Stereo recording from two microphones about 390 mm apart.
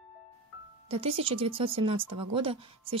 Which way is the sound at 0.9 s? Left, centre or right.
Centre.